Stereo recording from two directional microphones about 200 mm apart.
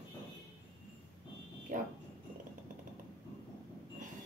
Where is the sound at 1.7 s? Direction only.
40° right (ahead or behind).